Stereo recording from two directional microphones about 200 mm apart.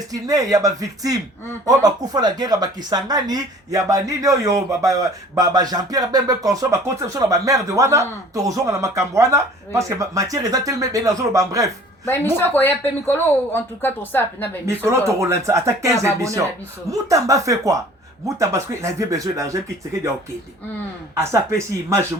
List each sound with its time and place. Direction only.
0.1 s speech: 15° right (ahead or behind)
12.0 s speech: 10° left (ahead or behind)
14.8 s speech: 15° right (ahead or behind)